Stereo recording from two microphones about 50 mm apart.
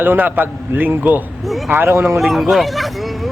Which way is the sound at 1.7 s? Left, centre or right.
Right.